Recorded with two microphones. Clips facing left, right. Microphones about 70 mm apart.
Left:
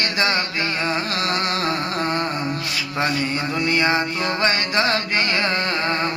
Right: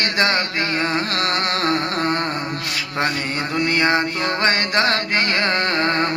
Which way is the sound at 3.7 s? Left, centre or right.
Right.